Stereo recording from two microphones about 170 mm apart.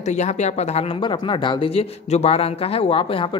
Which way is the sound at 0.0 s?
45° left (ahead or behind).